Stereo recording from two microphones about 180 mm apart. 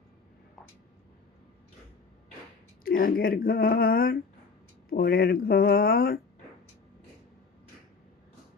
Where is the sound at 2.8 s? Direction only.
55° left (ahead or behind).